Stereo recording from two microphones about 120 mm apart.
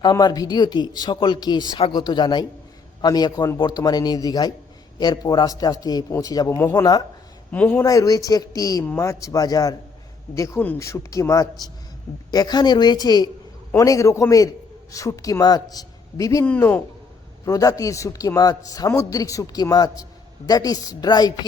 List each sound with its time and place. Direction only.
0.0 s speech: 35° left (ahead or behind)
6.6 s a man's voice: 20° left (ahead or behind)
7.9 s a man's voice: 30° left (ahead or behind)
16.5 s a man's voice: 15° left (ahead or behind)
17.4 s a man's voice: 30° left (ahead or behind)